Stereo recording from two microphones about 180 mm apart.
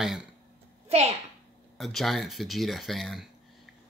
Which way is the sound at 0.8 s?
35° right (ahead or behind).